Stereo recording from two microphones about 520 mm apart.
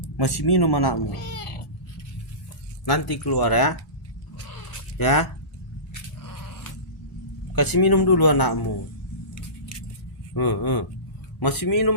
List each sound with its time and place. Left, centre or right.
0.2 s speech: left
1.1 s speech: left
2.8 s speech: left
4.4 s a sound: left
7.5 s speech: left
9.3 s keys jangling: left
10.3 s speech: left